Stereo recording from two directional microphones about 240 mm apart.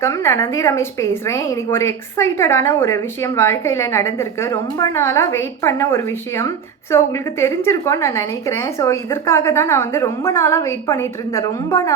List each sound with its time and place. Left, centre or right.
0.0 s a woman's voice: centre